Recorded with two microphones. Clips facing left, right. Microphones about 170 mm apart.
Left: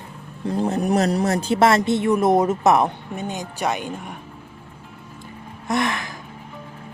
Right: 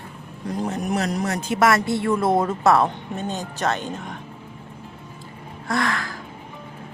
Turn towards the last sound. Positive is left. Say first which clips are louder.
# left 1 dB
turn(degrees=20)  # may be behind; listen again after turning